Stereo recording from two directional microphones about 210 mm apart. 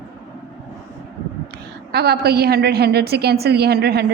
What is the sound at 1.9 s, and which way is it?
A woman's voice, 50° right (ahead or behind).